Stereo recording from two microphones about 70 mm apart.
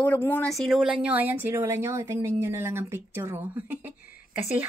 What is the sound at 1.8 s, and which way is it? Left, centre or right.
Speech, right.